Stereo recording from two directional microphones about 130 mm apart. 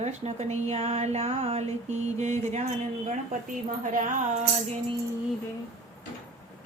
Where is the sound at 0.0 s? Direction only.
60° right (ahead or behind).